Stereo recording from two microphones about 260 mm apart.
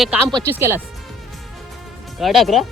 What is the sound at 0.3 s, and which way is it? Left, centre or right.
Speech, centre.